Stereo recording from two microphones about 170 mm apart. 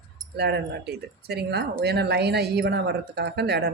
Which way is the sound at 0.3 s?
75° right (ahead or behind).